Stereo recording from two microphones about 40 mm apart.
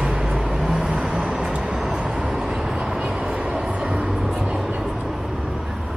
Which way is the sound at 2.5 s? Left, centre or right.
Centre.